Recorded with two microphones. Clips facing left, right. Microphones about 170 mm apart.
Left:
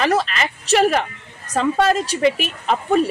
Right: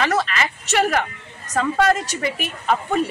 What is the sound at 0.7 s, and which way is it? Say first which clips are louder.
A man's voice: left 4 dB; 30° left (ahead or behind).